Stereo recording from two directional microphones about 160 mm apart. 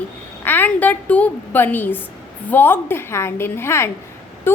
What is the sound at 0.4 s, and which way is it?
A woman's voice, 10° left (ahead or behind).